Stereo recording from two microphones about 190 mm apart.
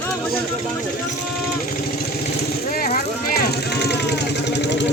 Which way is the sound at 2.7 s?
55° left (ahead or behind).